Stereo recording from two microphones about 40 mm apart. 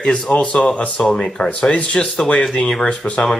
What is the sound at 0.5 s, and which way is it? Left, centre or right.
Speech, left.